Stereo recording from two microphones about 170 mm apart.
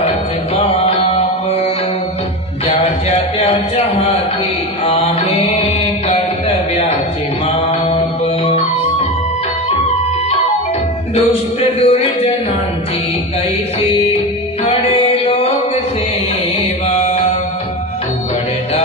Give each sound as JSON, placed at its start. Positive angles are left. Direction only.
{"t": 0.6, "sound": "mantra", "side_deg": 35}
{"t": 2.6, "sound": "a sound", "side_deg": 35}
{"t": 4.8, "sound": "mantra", "side_deg": 40}
{"t": 7.4, "sound": "mantra", "side_deg": 35}
{"t": 11.8, "sound": "a sound", "side_deg": 35}
{"t": 14.6, "sound": "music", "side_deg": 35}
{"t": 16.8, "sound": "mantra", "side_deg": 40}